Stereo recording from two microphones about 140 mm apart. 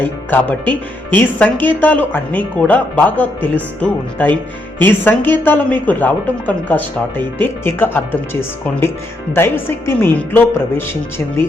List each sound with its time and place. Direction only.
0.0 s speech: 10° left (ahead or behind)